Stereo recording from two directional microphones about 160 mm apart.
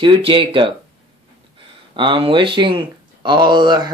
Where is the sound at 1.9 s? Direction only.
30° right (ahead or behind).